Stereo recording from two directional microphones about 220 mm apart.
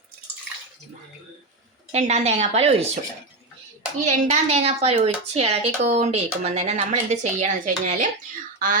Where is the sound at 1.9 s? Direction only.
30° right (ahead or behind).